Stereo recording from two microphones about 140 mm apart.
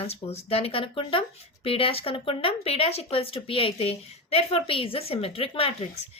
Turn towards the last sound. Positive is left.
turn(degrees=45)  # may be behind; listen again after turning